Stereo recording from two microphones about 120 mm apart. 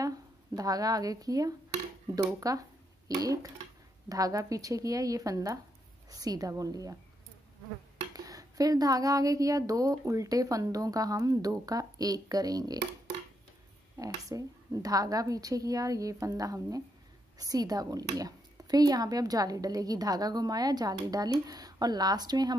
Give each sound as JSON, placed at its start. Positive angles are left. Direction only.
{"t": 0.0, "sound": "a woman's voice", "side_deg": -30}
{"t": 8.1, "sound": "speech", "side_deg": -30}
{"t": 13.9, "sound": "speech", "side_deg": -30}